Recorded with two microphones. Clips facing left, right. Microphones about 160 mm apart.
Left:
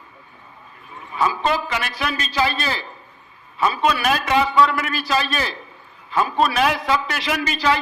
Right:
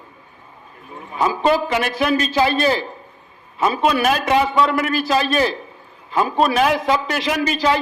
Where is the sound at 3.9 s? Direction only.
45° right (ahead or behind).